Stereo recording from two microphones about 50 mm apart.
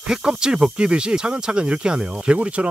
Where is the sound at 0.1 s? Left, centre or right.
Centre.